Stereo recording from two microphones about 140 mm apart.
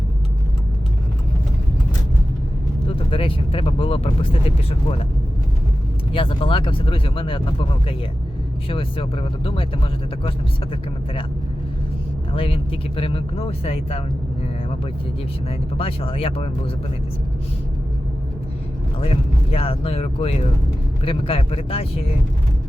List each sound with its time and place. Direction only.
2.8 s speech: 40° left (ahead or behind)
6.1 s speech: 40° left (ahead or behind)
12.3 s speech: 40° left (ahead or behind)
15.4 s speech: 45° left (ahead or behind)
18.9 s speech: 45° left (ahead or behind)